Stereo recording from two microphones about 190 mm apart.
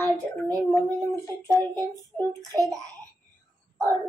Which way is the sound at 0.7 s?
15° left (ahead or behind).